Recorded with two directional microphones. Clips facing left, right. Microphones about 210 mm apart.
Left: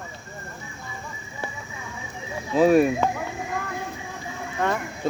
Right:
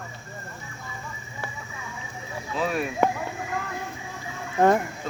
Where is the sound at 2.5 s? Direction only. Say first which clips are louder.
Left 11 dB; 40° left (ahead or behind).